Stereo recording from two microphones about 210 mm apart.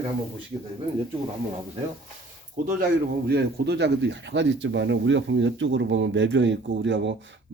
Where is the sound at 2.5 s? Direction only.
45° right (ahead or behind).